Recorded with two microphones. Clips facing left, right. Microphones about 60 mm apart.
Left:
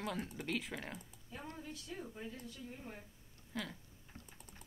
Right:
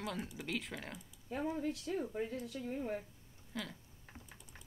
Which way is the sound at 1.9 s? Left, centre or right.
Right.